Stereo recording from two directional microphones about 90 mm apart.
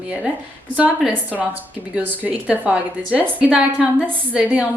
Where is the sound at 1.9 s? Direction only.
15° right (ahead or behind).